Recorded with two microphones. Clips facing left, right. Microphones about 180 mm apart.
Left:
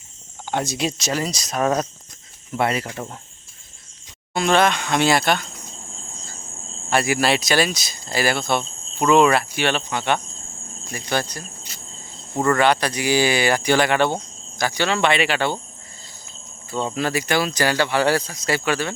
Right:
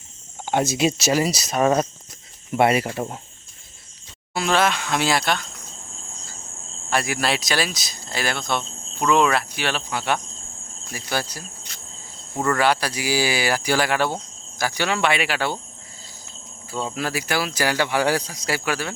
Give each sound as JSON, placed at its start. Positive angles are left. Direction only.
{"t": 0.6, "sound": "speech", "side_deg": -5}
{"t": 2.6, "sound": "speech", "side_deg": -15}
{"t": 4.4, "sound": "speech", "side_deg": -5}
{"t": 6.9, "sound": "speech", "side_deg": 0}
{"t": 16.7, "sound": "speech", "side_deg": -5}